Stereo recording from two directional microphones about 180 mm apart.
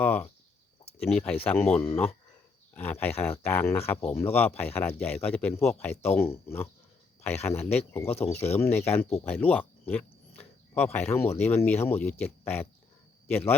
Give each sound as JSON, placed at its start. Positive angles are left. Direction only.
{"t": 0.0, "sound": "speech", "side_deg": 10}